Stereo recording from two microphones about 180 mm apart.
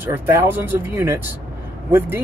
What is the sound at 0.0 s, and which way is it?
Speech, 10° right (ahead or behind).